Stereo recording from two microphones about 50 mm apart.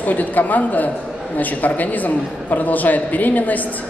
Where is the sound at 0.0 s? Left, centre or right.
Left.